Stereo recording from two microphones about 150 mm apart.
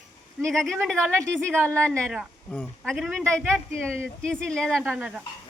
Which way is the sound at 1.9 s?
5° left (ahead or behind).